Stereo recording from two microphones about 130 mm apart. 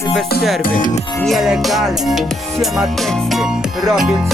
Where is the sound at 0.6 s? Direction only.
90° left.